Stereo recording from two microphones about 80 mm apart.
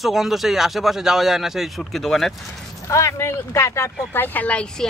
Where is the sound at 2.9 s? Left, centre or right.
Left; by 4.8 s centre.